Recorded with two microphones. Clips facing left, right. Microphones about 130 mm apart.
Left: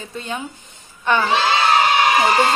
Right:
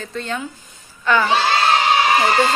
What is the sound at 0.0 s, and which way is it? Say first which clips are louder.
Speech: right 2 dB; 15° left (ahead or behind).